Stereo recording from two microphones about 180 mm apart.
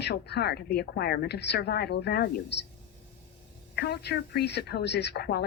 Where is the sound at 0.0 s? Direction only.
65° left (ahead or behind).